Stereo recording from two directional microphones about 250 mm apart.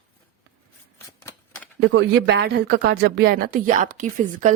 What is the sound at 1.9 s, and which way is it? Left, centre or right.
Speech, right.